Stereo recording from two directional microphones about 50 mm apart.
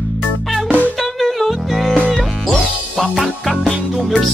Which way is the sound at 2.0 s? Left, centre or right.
Centre.